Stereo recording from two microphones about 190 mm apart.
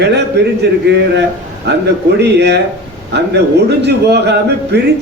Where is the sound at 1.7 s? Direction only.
65° right (ahead or behind).